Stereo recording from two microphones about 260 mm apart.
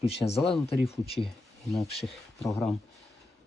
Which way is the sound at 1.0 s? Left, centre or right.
Left.